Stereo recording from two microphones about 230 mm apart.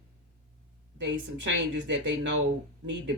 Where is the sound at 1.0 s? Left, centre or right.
Right.